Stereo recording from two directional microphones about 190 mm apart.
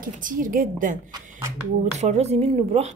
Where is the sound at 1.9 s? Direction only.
35° right (ahead or behind).